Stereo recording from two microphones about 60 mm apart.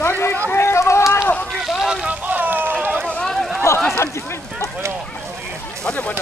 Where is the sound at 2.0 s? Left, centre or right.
Right.